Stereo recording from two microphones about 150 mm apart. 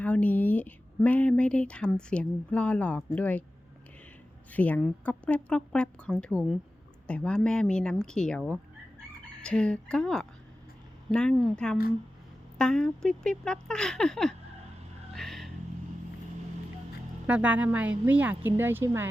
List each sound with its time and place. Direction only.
0.0 s speech: 10° left (ahead or behind)
4.5 s speech: 10° left (ahead or behind)
15.1 s vehicle: centre (ahead or behind)
17.2 s a woman's voice: 10° right (ahead or behind)